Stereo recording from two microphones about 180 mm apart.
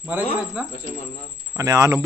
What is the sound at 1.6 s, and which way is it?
Speech, 15° right (ahead or behind).